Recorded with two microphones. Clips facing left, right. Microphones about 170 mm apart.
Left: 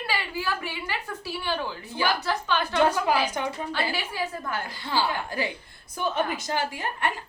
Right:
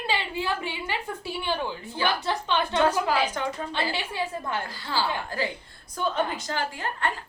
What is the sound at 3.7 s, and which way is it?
Speech, 25° right (ahead or behind).